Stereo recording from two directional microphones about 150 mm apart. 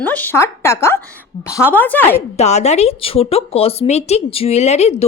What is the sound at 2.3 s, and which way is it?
Speech, 45° left (ahead or behind).